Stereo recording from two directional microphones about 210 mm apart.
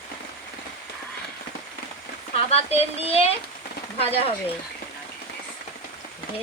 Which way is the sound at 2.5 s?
30° left (ahead or behind).